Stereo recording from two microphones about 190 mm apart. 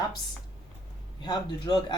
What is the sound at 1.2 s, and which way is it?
Speech, 20° left (ahead or behind).